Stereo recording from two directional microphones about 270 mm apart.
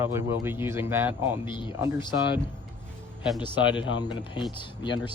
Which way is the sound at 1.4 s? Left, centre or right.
Centre.